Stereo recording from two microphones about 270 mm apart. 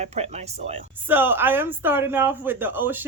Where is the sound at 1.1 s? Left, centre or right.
Centre.